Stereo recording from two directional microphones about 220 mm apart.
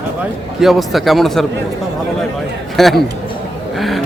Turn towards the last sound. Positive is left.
turn(degrees=0)  # may be behind; listen again after turning